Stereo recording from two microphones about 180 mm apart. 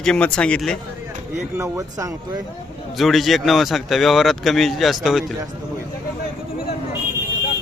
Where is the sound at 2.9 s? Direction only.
Centre (ahead or behind).